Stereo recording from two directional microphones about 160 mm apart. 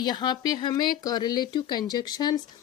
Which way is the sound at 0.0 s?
25° left (ahead or behind).